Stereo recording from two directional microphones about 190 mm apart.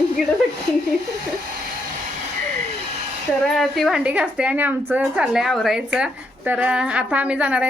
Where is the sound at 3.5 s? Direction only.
Centre (ahead or behind).